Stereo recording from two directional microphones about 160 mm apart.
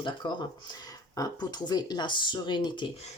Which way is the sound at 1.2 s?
25° left (ahead or behind).